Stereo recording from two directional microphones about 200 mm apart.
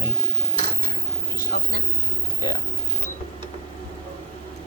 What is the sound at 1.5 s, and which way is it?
Speech, 50° left (ahead or behind).